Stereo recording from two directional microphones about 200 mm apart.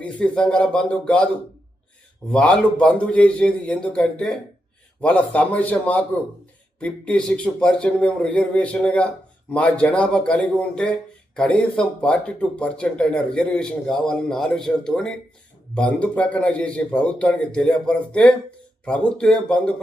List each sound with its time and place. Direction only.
0.0 s speech: 5° left (ahead or behind)
2.3 s speech: 5° left (ahead or behind)